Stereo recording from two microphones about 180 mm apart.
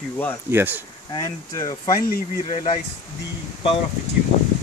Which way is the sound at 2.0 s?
55° left (ahead or behind).